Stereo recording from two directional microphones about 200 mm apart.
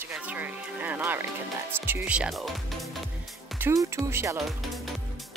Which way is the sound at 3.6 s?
15° right (ahead or behind).